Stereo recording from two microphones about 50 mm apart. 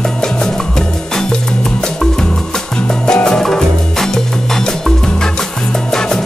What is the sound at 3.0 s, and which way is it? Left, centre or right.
Music, centre.